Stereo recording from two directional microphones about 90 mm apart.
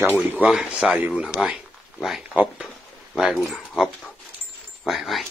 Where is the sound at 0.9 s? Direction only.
15° right (ahead or behind).